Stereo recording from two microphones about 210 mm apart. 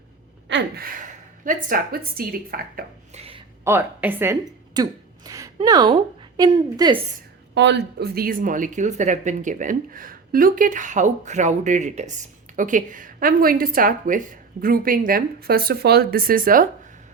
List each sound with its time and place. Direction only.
0.4 s gasp: 55° right (ahead or behind)
0.9 s a woman's voice: 40° right (ahead or behind)
3.2 s a sound: 25° right (ahead or behind)
3.6 s a woman's voice: 10° right (ahead or behind)
7.5 s a woman's voice: 55° right (ahead or behind)